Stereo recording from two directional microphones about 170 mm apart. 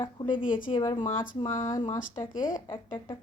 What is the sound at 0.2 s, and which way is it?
Speech, 30° left (ahead or behind).